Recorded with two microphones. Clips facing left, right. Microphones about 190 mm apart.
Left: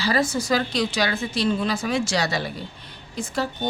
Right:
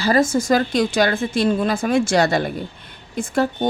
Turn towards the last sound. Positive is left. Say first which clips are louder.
# right 7 dB
turn(degrees=-55)  # may be behind; listen again after turning